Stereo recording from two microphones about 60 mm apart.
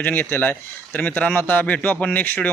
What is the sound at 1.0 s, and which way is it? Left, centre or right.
Speech, left.